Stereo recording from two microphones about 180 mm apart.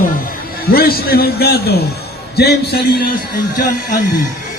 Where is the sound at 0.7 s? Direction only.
60° left (ahead or behind).